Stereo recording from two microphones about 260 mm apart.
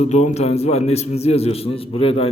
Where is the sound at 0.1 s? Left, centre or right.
Left.